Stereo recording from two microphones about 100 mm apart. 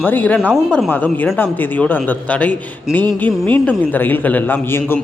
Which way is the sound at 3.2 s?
15° left (ahead or behind).